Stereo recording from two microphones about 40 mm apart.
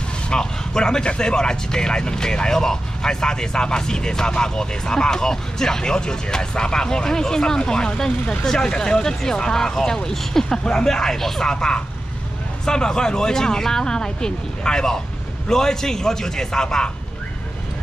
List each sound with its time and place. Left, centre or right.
0.3 s speech: centre
11.5 s speech: left